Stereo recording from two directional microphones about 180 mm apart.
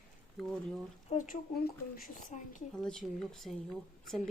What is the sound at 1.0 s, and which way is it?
Speech, 45° left (ahead or behind).